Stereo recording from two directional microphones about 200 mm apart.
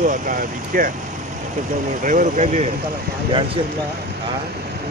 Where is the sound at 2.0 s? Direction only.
40° right (ahead or behind).